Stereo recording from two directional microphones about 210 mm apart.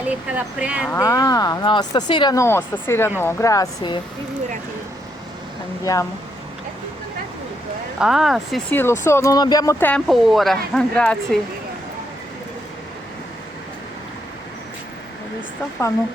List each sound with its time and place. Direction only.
0.0 s speech: 5° right (ahead or behind)
0.9 s speech: 15° left (ahead or behind)
5.8 s speech: 15° left (ahead or behind)
7.9 s speech: 5° right (ahead or behind)
8.7 s speech: 10° left (ahead or behind)